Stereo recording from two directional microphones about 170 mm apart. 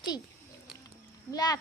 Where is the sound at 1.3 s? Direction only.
20° left (ahead or behind).